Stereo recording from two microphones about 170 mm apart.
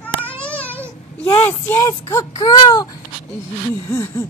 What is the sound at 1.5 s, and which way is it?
Speech, 15° left (ahead or behind).